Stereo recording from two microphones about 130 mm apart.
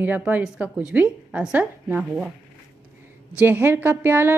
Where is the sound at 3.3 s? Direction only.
15° right (ahead or behind).